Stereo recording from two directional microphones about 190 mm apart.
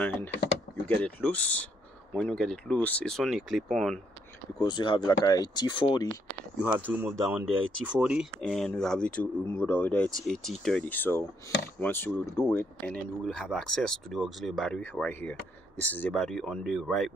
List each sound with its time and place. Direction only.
0.8 s speech: 5° left (ahead or behind)
4.6 s speech: 25° left (ahead or behind)
6.6 s speech: 10° right (ahead or behind)